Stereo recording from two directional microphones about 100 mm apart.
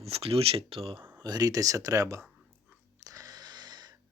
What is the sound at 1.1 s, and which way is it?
Speech, 40° right (ahead or behind).